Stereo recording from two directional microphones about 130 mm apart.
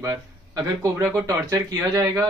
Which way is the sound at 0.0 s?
25° right (ahead or behind).